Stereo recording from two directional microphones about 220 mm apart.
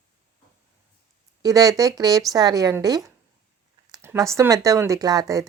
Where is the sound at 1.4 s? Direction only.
15° right (ahead or behind).